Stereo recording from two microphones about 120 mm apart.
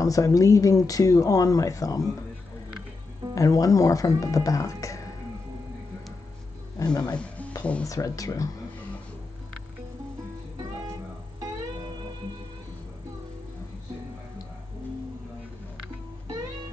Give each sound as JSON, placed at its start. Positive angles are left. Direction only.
{"t": 0.0, "sound": "speech", "side_deg": 30}
{"t": 3.3, "sound": "speech", "side_deg": 30}
{"t": 6.8, "sound": "speech", "side_deg": 35}
{"t": 7.2, "sound": "music", "side_deg": 10}
{"t": 7.8, "sound": "speech", "side_deg": 30}